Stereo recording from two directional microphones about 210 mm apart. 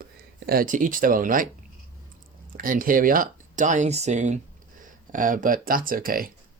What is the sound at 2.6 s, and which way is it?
Speech, 40° right (ahead or behind).